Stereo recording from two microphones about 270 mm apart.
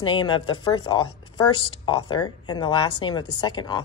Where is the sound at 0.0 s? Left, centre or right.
Centre.